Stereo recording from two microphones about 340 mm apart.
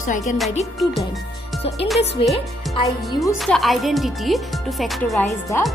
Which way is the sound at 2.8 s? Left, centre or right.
Centre.